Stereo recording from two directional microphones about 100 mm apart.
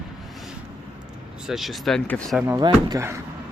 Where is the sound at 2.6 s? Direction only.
45° right (ahead or behind).